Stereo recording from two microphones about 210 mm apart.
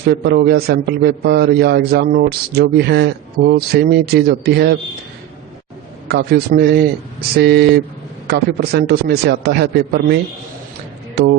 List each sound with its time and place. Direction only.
0.1 s a man's voice: 50° right (ahead or behind)
6.1 s a man's voice: 50° right (ahead or behind)